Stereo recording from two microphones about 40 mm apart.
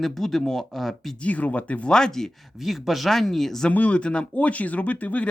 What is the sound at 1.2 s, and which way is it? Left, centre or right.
Speech, left.